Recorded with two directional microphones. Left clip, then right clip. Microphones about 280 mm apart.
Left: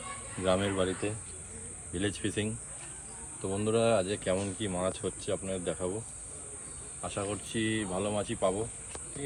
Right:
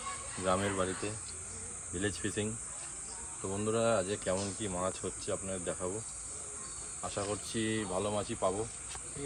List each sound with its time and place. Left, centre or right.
0.4 s speech: centre
7.0 s speech: centre